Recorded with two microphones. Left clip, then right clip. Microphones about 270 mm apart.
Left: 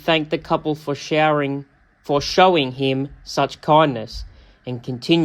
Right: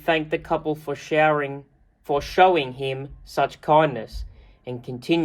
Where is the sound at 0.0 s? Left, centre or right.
Left.